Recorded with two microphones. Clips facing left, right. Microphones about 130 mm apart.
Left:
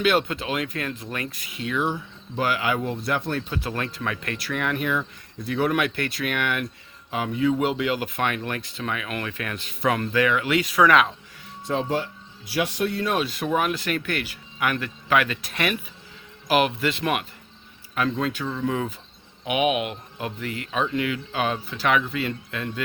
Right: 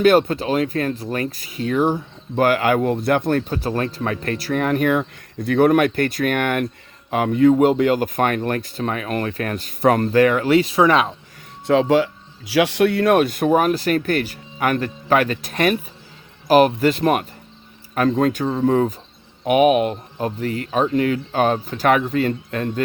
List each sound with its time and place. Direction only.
0.0 s speech: 45° right (ahead or behind)
11.6 s speech: 85° right; by 22.8 s 40° right (ahead or behind)